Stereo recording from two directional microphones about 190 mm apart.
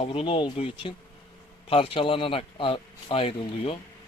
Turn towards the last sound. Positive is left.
turn(degrees=30)  # may be behind; listen again after turning